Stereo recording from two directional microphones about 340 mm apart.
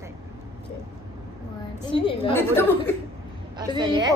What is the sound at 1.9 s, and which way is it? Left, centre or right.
Speech, centre.